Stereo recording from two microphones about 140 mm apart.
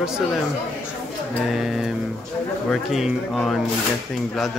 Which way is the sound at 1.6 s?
Centre (ahead or behind).